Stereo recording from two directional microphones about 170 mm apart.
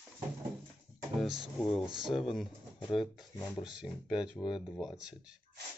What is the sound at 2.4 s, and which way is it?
Pigeon, 30° left (ahead or behind).